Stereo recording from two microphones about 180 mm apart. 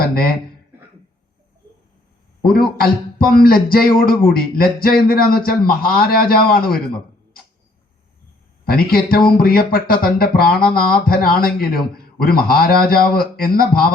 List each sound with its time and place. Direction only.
0.0 s a man's voice: 55° left (ahead or behind)
2.4 s a man's voice: 55° left (ahead or behind)
8.6 s a man's voice: 55° left (ahead or behind)